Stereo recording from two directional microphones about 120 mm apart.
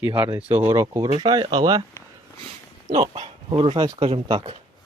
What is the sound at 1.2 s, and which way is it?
Speech, 35° right (ahead or behind).